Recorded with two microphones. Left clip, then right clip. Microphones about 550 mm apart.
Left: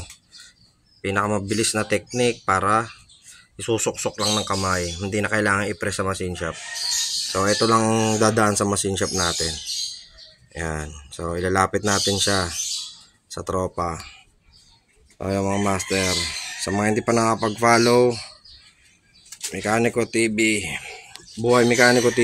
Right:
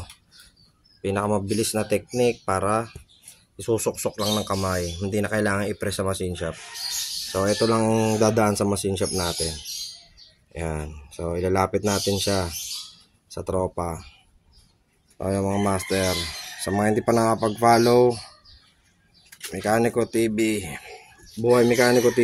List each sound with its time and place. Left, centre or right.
1.0 s speech: right
15.1 s speech: right
19.5 s speech: right